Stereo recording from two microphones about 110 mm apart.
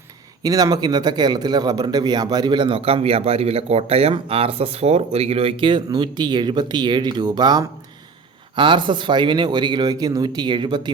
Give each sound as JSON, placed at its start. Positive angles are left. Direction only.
{"t": 0.4, "sound": "speech", "side_deg": -35}